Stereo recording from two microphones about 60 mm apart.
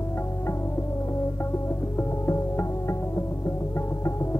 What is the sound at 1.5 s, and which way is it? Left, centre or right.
Music, left.